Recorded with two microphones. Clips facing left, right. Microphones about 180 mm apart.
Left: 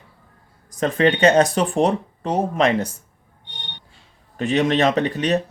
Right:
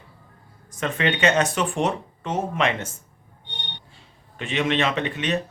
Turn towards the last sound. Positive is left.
turn(degrees=40)  # may be behind; listen again after turning